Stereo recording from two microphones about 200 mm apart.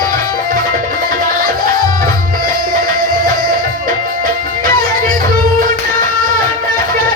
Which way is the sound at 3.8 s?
45° right (ahead or behind).